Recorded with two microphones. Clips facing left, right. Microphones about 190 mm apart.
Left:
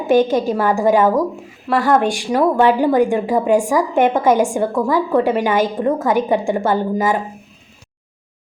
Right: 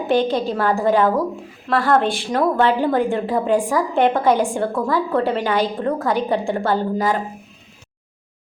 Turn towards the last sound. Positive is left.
turn(degrees=15)  # may be behind; listen again after turning